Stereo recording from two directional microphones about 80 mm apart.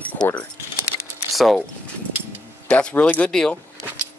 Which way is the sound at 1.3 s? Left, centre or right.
Centre.